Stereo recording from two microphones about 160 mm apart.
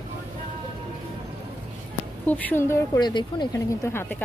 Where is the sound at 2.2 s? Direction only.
10° left (ahead or behind); by 3.4 s 30° left (ahead or behind).